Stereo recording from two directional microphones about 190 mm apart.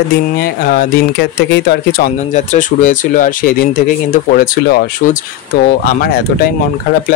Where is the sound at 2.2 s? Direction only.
40° left (ahead or behind).